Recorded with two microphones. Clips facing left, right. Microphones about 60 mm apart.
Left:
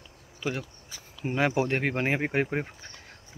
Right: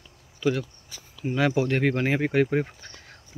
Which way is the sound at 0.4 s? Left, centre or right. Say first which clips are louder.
Right 7 dB; centre.